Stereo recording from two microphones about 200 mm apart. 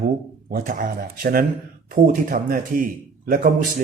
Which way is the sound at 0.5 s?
45° right (ahead or behind).